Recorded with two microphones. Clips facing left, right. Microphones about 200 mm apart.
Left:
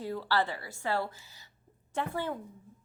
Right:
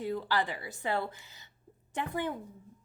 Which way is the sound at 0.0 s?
20° right (ahead or behind).